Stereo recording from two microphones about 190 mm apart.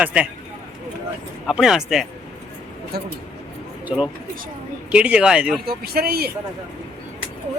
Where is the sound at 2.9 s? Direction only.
55° right (ahead or behind).